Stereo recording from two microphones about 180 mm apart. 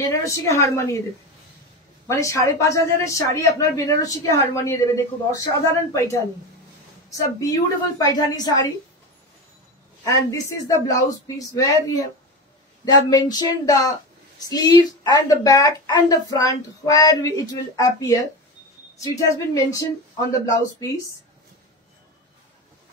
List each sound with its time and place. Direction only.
0.0 s a woman's voice: 15° left (ahead or behind)
2.0 s a woman's voice: 15° left (ahead or behind)
10.1 s speech: 20° left (ahead or behind)
13.1 s speech: 20° left (ahead or behind)
19.2 s a woman's voice: 15° left (ahead or behind)
20.8 s a woman's voice: 15° left (ahead or behind)